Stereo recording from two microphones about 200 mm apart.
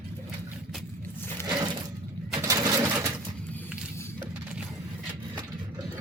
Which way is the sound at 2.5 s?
15° right (ahead or behind).